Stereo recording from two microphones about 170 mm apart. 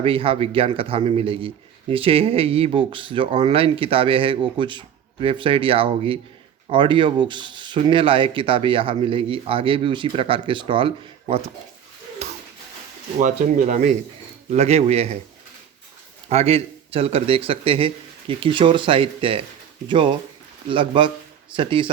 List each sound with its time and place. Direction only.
0.0 s speech: 35° right (ahead or behind)
13.1 s speech: 45° right (ahead or behind)
16.3 s speech: 35° right (ahead or behind)